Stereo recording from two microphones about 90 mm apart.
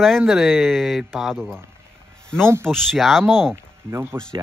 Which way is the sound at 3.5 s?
30° right (ahead or behind).